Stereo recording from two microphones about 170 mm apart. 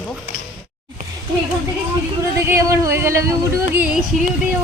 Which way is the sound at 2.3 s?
15° right (ahead or behind).